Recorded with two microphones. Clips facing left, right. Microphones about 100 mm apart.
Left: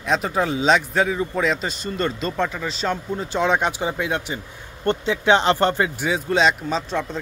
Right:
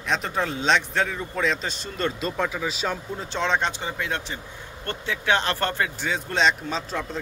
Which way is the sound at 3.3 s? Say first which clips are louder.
Left 4 dB; 10° left (ahead or behind).